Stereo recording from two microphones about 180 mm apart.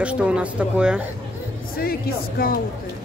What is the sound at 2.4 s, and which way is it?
Speech, 55° left (ahead or behind).